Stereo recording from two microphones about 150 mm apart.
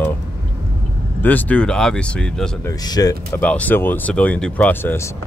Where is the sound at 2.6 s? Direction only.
25° left (ahead or behind).